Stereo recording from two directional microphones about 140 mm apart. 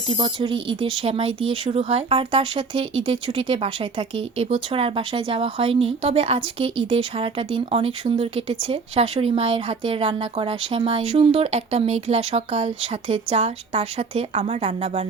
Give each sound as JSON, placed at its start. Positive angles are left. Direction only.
{"t": 0.2, "sound": "speech", "side_deg": -35}